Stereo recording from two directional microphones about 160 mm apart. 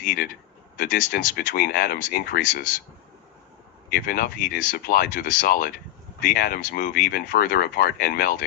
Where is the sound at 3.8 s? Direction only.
70° left (ahead or behind).